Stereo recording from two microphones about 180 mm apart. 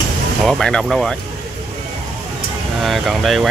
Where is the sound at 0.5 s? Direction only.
5° left (ahead or behind).